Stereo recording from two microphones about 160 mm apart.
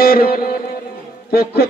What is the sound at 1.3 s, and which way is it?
Speech, 80° left.